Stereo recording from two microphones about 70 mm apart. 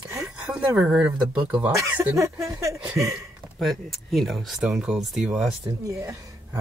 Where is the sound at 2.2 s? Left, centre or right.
Right.